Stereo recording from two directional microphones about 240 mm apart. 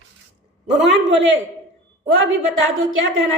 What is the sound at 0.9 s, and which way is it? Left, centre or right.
A man's voice, right.